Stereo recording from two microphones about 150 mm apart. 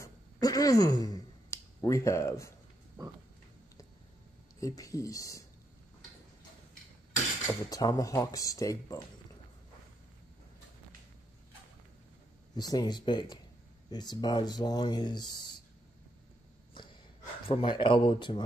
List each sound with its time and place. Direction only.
0.0 s a sound: 25° left (ahead or behind)
4.6 s speech: 20° left (ahead or behind)
7.4 s speech: 25° left (ahead or behind)
12.5 s speech: 25° left (ahead or behind)
17.5 s a man's voice: 35° left (ahead or behind)